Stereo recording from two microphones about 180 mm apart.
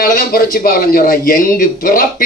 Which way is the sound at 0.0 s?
55° left (ahead or behind).